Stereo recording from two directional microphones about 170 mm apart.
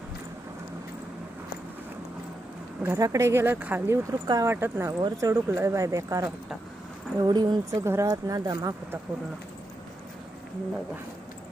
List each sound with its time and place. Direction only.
2.8 s speech: 15° right (ahead or behind)